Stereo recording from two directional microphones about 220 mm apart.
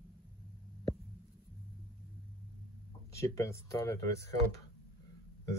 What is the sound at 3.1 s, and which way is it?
Speech, 15° left (ahead or behind).